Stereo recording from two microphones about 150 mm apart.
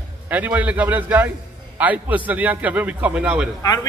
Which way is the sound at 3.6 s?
25° left (ahead or behind).